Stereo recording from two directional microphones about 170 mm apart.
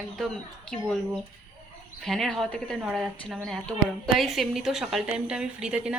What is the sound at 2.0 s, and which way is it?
A woman's voice, centre (ahead or behind).